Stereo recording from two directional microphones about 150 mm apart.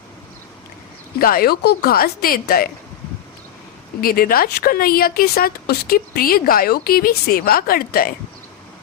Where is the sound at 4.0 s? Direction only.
75° left (ahead or behind).